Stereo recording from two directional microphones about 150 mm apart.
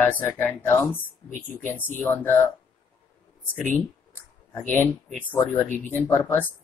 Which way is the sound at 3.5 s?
10° left (ahead or behind).